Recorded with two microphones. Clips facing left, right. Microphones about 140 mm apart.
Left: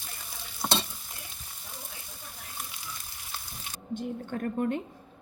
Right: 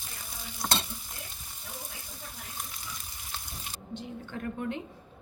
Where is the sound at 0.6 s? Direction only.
15° left (ahead or behind).